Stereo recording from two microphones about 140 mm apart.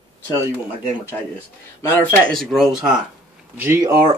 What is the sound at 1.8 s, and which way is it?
Speech, 15° left (ahead or behind).